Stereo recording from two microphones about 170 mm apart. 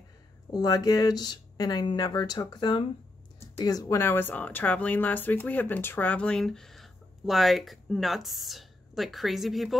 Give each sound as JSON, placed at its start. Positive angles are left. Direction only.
{"t": 0.5, "sound": "speech", "side_deg": 20}